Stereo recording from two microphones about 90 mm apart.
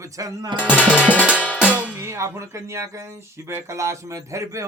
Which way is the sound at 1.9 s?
30° right (ahead or behind).